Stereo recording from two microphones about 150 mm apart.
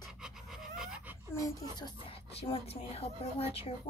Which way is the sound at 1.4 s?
30° left (ahead or behind).